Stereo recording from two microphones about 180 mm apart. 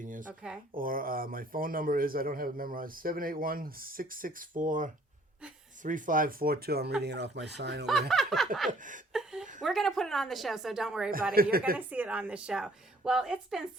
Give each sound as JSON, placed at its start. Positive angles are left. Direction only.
{"t": 0.0, "sound": "a sound", "side_deg": -45}
{"t": 0.8, "sound": "a man's voice", "side_deg": -50}
{"t": 7.9, "sound": "a woman's voice", "side_deg": 0}
{"t": 9.1, "sound": "a sound", "side_deg": 0}
{"t": 9.6, "sound": "a woman's voice", "side_deg": 0}
{"t": 11.5, "sound": "speech", "side_deg": -55}
{"t": 11.9, "sound": "a woman's voice", "side_deg": -10}